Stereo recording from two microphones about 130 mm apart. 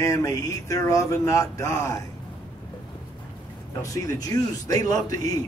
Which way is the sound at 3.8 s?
25° left (ahead or behind).